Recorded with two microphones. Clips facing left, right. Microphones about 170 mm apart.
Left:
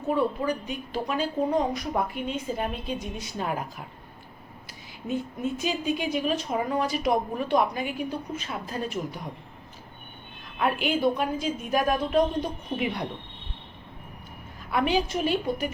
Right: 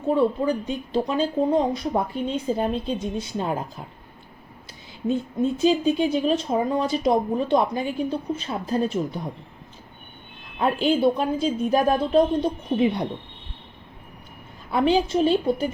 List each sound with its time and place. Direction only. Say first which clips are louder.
0.1 s speech: right 5 dB; 30° right (ahead or behind)
5.0 s speech: right 6 dB; 30° right (ahead or behind)
10.6 s speech: right 4 dB; 30° right (ahead or behind)
14.7 s speech: right 5 dB; 30° right (ahead or behind)